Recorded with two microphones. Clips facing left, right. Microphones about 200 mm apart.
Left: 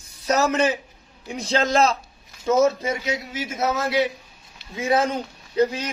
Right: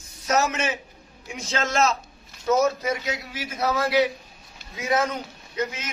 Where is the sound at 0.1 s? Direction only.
35° left (ahead or behind).